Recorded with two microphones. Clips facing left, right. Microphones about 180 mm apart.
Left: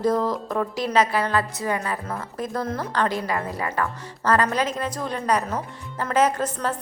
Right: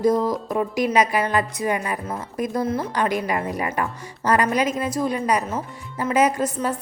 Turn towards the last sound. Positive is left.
turn(degrees=-10)  # may be behind; listen again after turning